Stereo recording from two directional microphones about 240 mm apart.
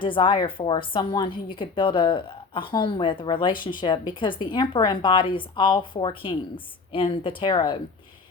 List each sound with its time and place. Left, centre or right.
0.0 s a woman's voice: left